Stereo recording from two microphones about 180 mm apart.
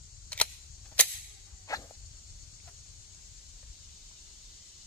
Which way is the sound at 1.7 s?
20° left (ahead or behind).